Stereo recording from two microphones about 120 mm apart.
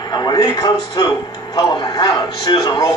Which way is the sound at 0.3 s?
35° left (ahead or behind).